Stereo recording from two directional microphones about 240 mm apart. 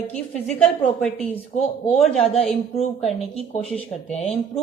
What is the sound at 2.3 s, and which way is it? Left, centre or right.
Speech, left.